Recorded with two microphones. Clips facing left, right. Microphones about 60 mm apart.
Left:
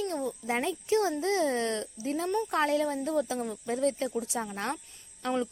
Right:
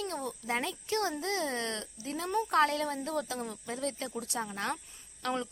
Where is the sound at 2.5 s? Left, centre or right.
Centre.